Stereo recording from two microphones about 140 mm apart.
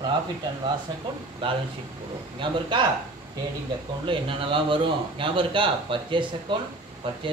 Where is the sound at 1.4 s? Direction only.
35° right (ahead or behind).